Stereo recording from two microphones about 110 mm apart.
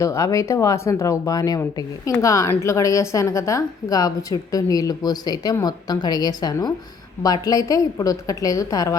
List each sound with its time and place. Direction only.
0.0 s a woman's voice: 30° left (ahead or behind)